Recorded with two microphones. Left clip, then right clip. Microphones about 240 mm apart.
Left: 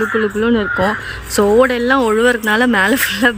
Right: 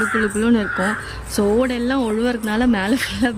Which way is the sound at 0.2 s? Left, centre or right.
Centre.